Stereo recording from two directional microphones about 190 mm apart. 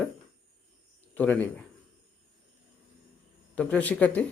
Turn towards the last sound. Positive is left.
turn(degrees=10)  # may be behind; listen again after turning